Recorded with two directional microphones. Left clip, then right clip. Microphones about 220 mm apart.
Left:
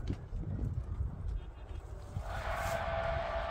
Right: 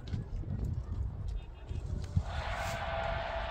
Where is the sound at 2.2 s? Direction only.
50° left (ahead or behind).